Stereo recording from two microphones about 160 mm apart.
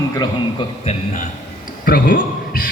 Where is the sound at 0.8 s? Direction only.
40° left (ahead or behind).